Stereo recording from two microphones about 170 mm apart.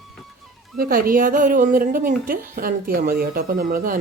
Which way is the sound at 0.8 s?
60° right (ahead or behind).